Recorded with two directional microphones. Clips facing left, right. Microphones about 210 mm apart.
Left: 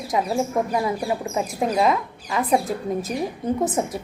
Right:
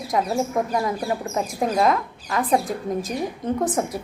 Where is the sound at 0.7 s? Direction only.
10° left (ahead or behind).